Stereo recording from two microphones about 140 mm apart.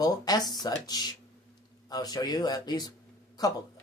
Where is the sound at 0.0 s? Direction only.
25° left (ahead or behind).